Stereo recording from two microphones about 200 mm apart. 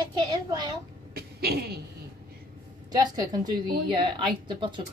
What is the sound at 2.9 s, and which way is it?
A woman's voice, 20° right (ahead or behind).